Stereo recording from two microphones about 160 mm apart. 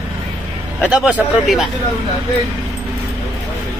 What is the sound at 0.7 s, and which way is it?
Speech, 5° right (ahead or behind).